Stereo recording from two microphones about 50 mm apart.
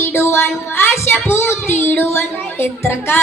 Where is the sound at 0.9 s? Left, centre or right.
Left.